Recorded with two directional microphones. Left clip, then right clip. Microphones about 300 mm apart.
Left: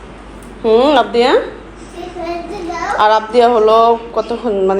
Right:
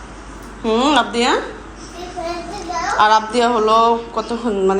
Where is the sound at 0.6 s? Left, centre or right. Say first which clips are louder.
Left 5 dB; centre.